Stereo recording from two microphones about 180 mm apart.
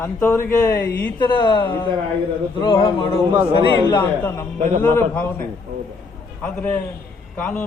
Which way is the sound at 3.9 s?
15° left (ahead or behind).